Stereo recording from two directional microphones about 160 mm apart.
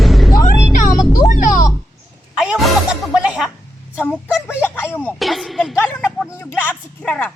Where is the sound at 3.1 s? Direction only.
5° right (ahead or behind).